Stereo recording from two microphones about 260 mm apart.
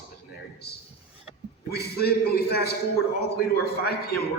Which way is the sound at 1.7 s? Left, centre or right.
Left.